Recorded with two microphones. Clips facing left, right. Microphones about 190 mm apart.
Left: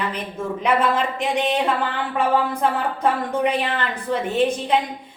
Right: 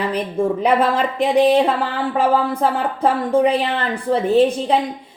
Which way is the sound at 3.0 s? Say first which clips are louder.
Right 6 dB; 30° right (ahead or behind).